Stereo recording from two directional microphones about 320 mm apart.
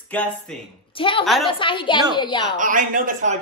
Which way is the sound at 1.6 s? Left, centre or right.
Centre.